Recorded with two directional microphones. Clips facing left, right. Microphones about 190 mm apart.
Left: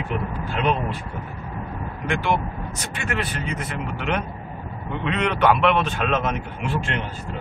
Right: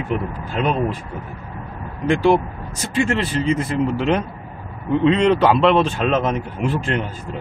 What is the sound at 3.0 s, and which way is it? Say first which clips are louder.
Speech: right 9 dB; 30° right (ahead or behind).